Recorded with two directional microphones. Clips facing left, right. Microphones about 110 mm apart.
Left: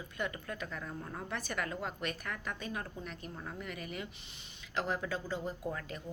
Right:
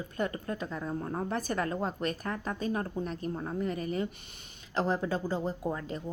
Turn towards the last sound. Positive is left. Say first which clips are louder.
# right 6 dB
turn(degrees=-30)  # may be behind; listen again after turning